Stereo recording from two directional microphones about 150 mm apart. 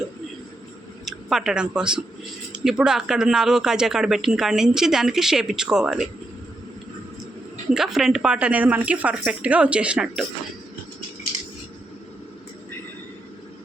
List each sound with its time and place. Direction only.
1.0 s speech: 5° right (ahead or behind)
7.7 s a woman's voice: centre (ahead or behind)